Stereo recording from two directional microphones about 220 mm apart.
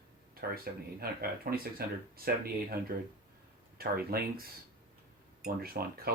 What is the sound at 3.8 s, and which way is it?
Speech, 45° right (ahead or behind).